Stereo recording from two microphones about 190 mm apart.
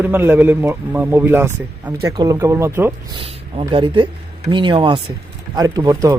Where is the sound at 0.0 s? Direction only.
10° right (ahead or behind).